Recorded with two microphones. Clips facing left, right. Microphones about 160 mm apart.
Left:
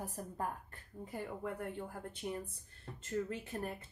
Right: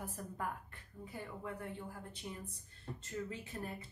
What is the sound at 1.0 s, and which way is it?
Speech, 55° left (ahead or behind).